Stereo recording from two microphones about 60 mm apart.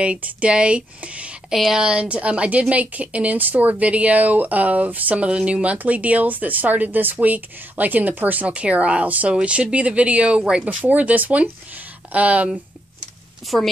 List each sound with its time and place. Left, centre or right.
0.0 s a woman's voice: right
1.5 s a woman's voice: centre
10.8 s a woman's voice: right
13.4 s a woman's voice: centre